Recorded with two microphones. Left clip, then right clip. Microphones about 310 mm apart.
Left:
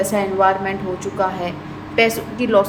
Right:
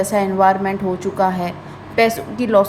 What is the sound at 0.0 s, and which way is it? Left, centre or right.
A woman's voice, centre.